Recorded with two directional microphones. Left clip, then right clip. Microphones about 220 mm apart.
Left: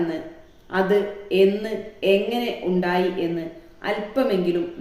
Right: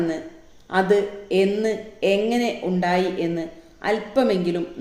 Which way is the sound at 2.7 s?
50° right (ahead or behind).